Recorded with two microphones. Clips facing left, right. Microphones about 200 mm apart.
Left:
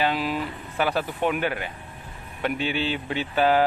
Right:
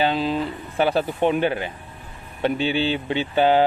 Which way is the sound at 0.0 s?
25° right (ahead or behind).